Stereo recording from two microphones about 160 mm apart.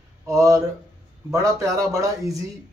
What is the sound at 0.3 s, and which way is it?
Speech, 20° right (ahead or behind).